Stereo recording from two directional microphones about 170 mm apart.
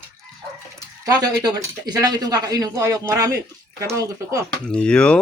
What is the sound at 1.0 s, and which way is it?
Speech, 20° right (ahead or behind).